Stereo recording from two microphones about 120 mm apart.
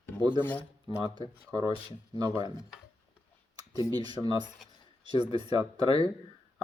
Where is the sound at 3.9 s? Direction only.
35° right (ahead or behind).